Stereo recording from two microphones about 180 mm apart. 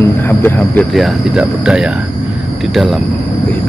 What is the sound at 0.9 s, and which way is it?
Speech, centre (ahead or behind).